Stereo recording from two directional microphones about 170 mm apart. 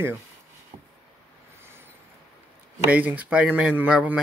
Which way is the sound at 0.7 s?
40° right (ahead or behind).